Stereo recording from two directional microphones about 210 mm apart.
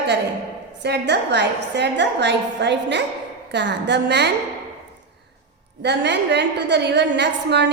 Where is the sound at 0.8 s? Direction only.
55° right (ahead or behind).